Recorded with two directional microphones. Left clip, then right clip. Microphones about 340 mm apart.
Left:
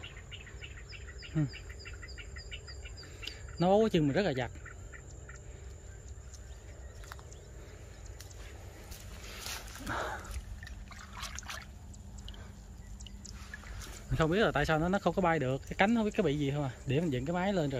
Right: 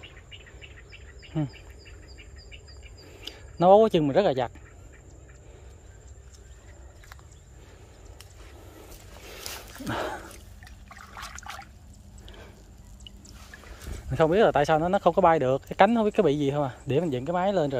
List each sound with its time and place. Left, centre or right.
3.3 s speech: centre
9.4 s dog: right
10.6 s trickle: centre
14.1 s speech: centre